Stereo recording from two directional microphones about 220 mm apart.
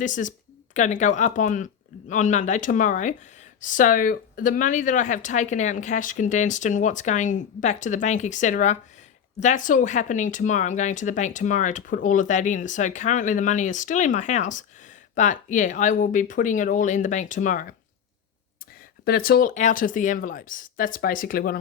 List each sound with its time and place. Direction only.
0.0 s speech: 35° left (ahead or behind)
19.0 s speech: 45° left (ahead or behind)